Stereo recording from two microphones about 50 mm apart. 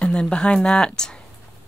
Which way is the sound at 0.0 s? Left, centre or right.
Centre.